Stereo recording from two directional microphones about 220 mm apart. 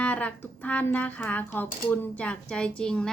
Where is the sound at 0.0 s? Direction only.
5° left (ahead or behind).